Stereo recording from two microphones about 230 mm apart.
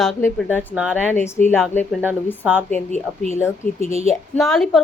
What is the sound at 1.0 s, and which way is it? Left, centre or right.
Speech, centre.